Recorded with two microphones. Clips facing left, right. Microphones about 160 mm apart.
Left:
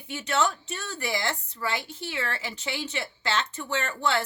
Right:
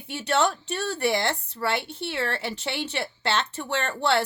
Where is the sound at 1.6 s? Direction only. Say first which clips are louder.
Right 4 dB; 65° right (ahead or behind).